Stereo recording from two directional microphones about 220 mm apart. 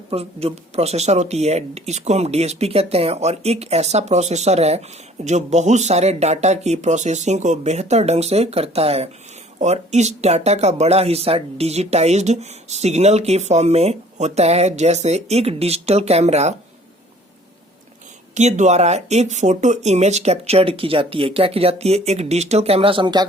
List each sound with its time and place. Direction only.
0.1 s speech: 25° right (ahead or behind)
18.3 s speech: 30° right (ahead or behind)